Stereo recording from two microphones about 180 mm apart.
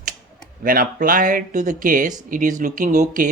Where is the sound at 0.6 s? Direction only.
50° right (ahead or behind).